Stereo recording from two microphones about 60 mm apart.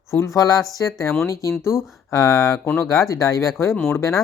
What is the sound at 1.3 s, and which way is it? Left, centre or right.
Speech, left.